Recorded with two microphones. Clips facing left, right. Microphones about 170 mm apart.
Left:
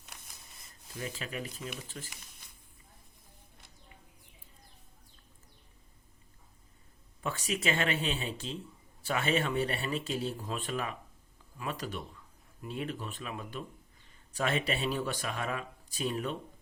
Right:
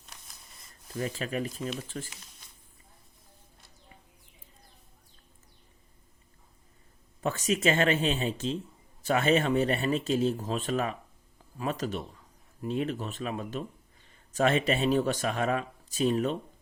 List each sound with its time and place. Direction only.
0.9 s speech: 45° right (ahead or behind)
7.2 s speech: 45° right (ahead or behind)